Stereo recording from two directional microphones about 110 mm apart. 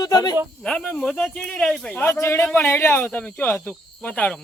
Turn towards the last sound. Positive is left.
turn(degrees=10)  # may be behind; listen again after turning